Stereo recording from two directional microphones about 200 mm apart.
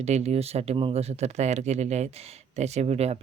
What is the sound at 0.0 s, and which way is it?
Speech, 35° right (ahead or behind).